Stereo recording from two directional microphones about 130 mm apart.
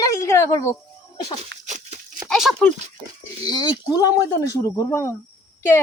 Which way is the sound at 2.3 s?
Centre (ahead or behind).